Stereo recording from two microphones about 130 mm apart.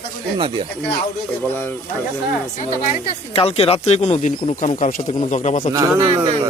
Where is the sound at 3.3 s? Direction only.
50° left (ahead or behind); by 5.1 s 90° left.